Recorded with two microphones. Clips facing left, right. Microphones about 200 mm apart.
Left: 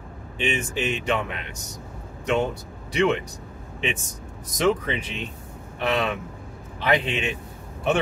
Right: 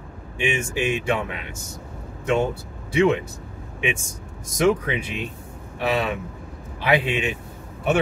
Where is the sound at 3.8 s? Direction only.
10° right (ahead or behind).